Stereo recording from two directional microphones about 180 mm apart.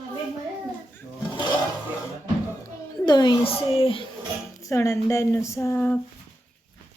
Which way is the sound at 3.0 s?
25° left (ahead or behind).